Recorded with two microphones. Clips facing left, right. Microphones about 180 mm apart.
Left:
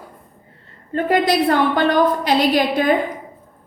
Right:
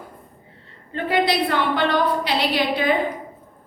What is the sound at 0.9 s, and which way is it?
A woman's voice, 45° left (ahead or behind).